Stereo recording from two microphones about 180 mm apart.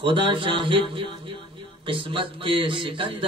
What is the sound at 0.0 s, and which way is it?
A man's voice, 30° right (ahead or behind).